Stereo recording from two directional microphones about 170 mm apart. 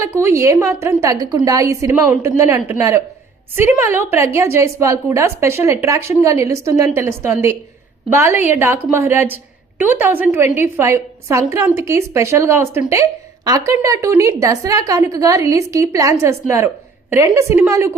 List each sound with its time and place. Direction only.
0.0 s a woman's voice: 15° right (ahead or behind)